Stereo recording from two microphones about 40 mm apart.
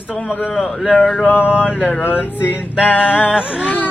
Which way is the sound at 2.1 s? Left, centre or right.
Left.